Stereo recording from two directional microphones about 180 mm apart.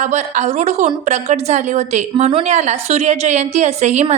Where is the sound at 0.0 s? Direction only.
40° right (ahead or behind).